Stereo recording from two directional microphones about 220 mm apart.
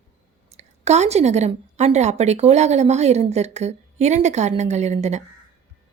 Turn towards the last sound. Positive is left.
turn(degrees=-30)  # may be behind; listen again after turning